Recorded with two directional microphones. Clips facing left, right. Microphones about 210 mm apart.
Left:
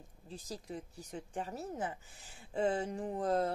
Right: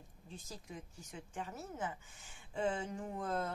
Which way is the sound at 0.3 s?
35° left (ahead or behind).